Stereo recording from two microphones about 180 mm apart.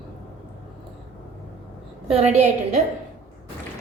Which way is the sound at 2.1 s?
35° right (ahead or behind).